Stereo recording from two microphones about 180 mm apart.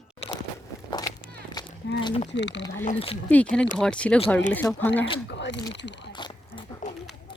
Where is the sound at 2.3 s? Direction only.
80° left.